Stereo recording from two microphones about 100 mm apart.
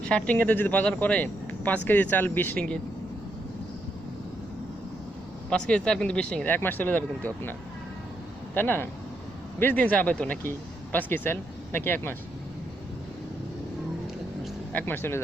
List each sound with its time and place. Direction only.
0.0 s speech: 10° left (ahead or behind)
5.5 s speech: 10° left (ahead or behind)
8.5 s speech: 20° left (ahead or behind)
14.7 s speech: 20° left (ahead or behind)